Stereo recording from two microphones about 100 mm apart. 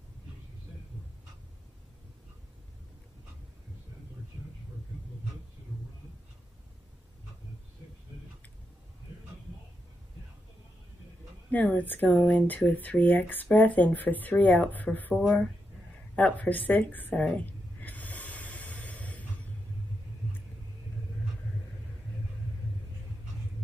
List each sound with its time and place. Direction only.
11.5 s speech: 15° left (ahead or behind)
16.2 s speech: 15° left (ahead or behind)
17.2 s snort: 15° left (ahead or behind)